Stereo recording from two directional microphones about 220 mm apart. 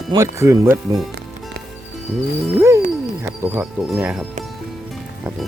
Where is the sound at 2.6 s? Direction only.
15° right (ahead or behind).